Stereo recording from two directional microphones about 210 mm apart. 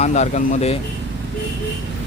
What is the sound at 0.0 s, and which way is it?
Speech, 35° left (ahead or behind).